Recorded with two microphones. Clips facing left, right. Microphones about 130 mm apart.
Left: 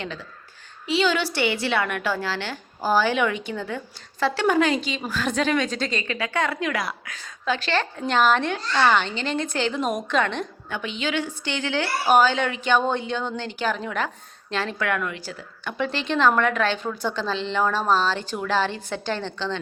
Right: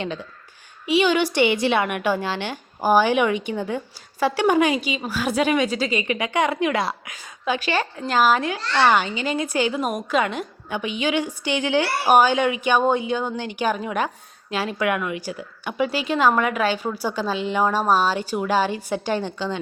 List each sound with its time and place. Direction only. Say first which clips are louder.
0.0 s a woman's voice: right 5 dB; 20° right (ahead or behind)
7.1 s a woman's voice: right 1 dB; 15° right (ahead or behind)